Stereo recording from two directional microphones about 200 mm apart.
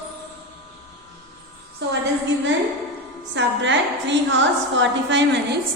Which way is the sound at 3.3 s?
65° right (ahead or behind).